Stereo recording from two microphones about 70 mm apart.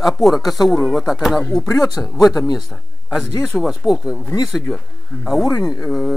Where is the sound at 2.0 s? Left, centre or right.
Centre.